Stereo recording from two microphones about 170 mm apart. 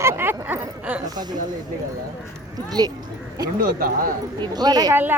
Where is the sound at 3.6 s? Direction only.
55° right (ahead or behind).